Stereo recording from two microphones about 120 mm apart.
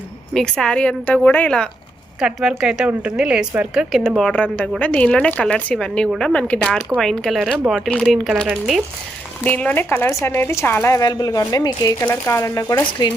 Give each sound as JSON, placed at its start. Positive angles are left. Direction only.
{"t": 0.3, "sound": "a woman's voice", "side_deg": 5}
{"t": 2.2, "sound": "a woman's voice", "side_deg": -5}
{"t": 9.4, "sound": "speech", "side_deg": 10}
{"t": 11.1, "sound": "speech", "side_deg": 35}